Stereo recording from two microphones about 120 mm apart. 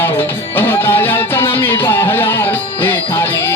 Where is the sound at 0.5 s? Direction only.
20° left (ahead or behind).